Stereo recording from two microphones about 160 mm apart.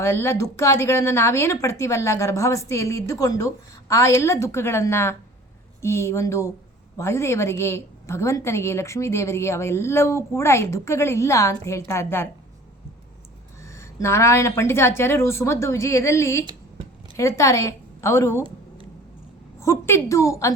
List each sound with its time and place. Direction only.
0.0 s a woman's voice: 15° left (ahead or behind)
13.6 s a woman's voice: 20° left (ahead or behind)
19.5 s a woman's voice: 15° left (ahead or behind)